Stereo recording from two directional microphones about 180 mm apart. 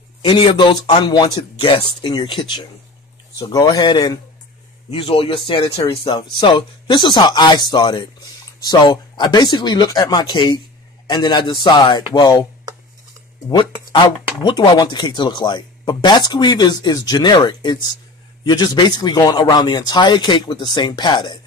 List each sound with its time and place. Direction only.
0.2 s a man's voice: 30° left (ahead or behind)
14.4 s speech: 25° left (ahead or behind)